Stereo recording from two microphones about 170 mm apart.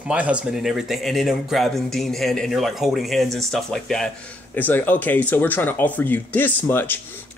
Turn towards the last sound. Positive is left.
turn(degrees=10)  # may be behind; listen again after turning